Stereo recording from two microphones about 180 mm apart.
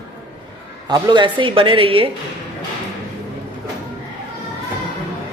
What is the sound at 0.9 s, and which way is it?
A woman's voice, 25° right (ahead or behind).